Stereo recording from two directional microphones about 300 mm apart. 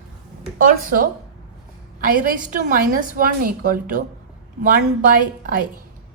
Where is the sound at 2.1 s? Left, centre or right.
Right.